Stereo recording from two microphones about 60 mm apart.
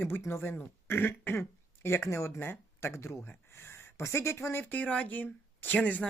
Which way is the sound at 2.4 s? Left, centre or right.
Left.